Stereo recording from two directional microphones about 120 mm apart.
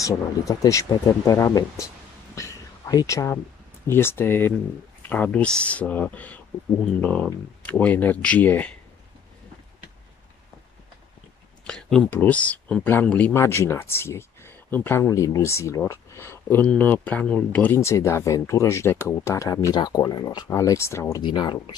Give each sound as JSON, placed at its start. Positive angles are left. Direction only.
{"t": 0.0, "sound": "speech", "side_deg": 25}
{"t": 2.3, "sound": "a sound", "side_deg": 30}
{"t": 3.8, "sound": "speech", "side_deg": 20}
{"t": 11.6, "sound": "speech", "side_deg": 5}
{"t": 13.3, "sound": "speech", "side_deg": 20}
{"t": 15.0, "sound": "speech", "side_deg": 30}
{"t": 17.7, "sound": "speech", "side_deg": 25}
{"t": 20.4, "sound": "speech", "side_deg": 25}
{"t": 21.2, "sound": "speech", "side_deg": 40}